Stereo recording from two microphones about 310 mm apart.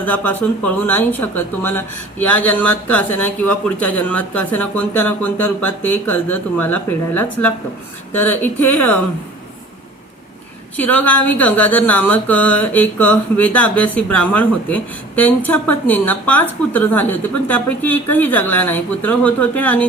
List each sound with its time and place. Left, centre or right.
0.0 s speech: centre
10.8 s speech: centre